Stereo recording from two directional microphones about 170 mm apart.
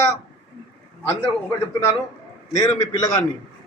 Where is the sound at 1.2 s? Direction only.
15° left (ahead or behind).